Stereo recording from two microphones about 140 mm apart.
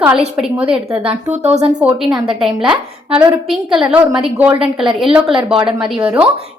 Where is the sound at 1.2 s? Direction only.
55° right (ahead or behind).